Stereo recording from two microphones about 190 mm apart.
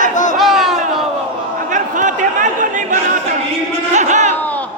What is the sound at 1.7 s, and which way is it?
Chatter, 40° right (ahead or behind).